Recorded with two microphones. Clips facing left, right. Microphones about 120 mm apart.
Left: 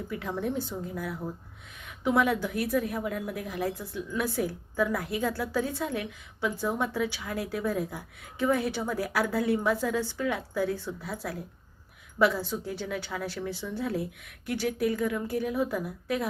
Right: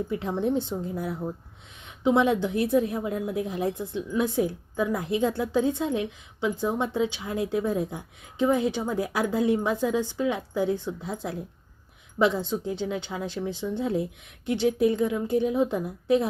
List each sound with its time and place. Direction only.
0.1 s a woman's voice: 25° right (ahead or behind)